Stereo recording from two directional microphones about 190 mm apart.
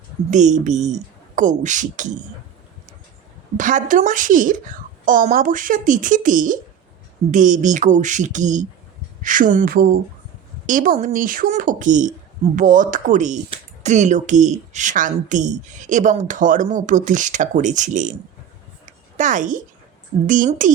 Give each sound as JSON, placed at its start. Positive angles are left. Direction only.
{"t": 0.3, "sound": "speech", "side_deg": -40}
{"t": 3.6, "sound": "a woman's voice", "side_deg": -45}
{"t": 19.1, "sound": "a woman's voice", "side_deg": -40}